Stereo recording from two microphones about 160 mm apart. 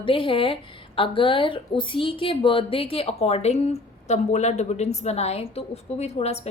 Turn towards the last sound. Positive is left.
turn(degrees=40)  # may be behind; listen again after turning